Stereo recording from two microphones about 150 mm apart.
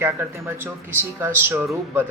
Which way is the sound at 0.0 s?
15° right (ahead or behind).